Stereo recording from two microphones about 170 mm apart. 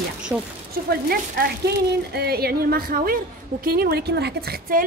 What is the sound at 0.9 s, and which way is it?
A woman's voice, 70° right (ahead or behind).